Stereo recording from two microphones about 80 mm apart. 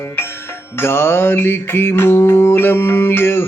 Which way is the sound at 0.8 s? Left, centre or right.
Left.